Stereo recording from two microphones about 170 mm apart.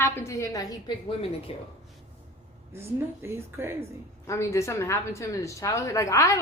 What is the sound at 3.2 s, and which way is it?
Speech, 15° right (ahead or behind).